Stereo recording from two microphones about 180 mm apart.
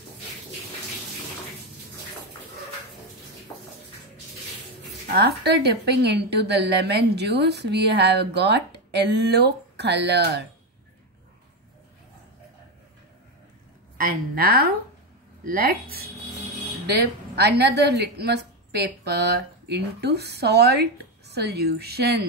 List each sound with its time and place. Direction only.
5.1 s a woman's voice: 70° right (ahead or behind)
13.9 s a woman's voice: 55° right (ahead or behind)